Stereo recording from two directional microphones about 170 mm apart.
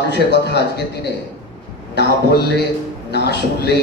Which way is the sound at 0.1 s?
80° left.